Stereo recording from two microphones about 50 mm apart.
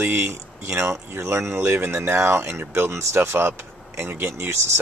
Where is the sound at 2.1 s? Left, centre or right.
Right.